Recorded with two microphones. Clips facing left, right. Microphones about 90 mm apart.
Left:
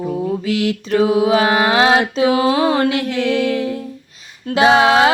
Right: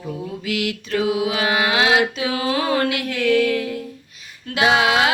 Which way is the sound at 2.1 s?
25° left (ahead or behind).